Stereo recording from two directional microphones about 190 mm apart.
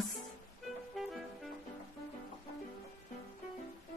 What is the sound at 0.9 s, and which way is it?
Music, centre (ahead or behind).